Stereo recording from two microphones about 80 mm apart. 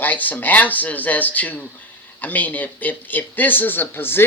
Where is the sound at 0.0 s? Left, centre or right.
Left.